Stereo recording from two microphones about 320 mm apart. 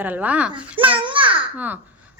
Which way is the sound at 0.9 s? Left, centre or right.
Centre.